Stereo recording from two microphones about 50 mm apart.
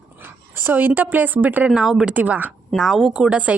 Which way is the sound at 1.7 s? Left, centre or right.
Centre.